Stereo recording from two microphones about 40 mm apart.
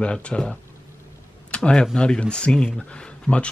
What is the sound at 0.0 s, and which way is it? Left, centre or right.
Speech, left.